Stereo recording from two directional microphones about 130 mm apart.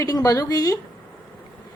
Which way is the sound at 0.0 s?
30° left (ahead or behind).